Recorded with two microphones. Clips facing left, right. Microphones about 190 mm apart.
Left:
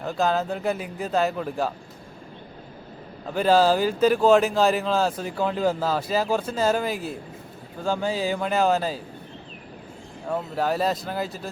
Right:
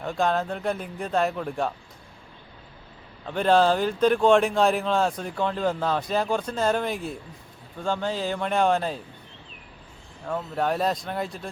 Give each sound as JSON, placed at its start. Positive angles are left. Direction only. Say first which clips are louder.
{"t": 0.0, "sound": "speech", "louder": "left 1 dB", "side_deg": 0}
{"t": 3.2, "sound": "speech", "louder": "left 1 dB", "side_deg": 5}
{"t": 10.2, "sound": "speech", "louder": "left 1 dB", "side_deg": 5}